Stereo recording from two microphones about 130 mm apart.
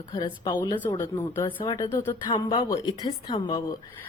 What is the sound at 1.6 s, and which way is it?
A woman's voice, 35° left (ahead or behind).